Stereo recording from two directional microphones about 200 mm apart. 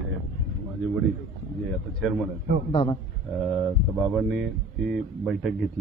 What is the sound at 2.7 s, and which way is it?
Speech, 25° left (ahead or behind).